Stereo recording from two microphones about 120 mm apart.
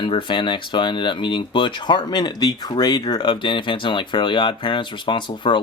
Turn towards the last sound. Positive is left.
turn(degrees=45)  # may be behind; listen again after turning